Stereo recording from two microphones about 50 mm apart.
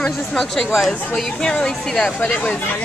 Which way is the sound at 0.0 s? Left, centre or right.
Centre.